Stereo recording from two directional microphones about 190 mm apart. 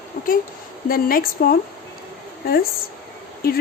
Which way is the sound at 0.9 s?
50° left (ahead or behind).